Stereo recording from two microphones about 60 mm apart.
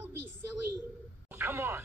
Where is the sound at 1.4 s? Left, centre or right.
Right.